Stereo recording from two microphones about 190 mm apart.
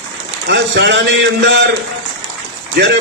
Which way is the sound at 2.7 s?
55° right (ahead or behind).